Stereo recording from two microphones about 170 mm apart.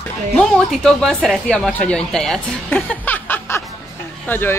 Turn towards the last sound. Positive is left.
turn(degrees=10)  # may be behind; listen again after turning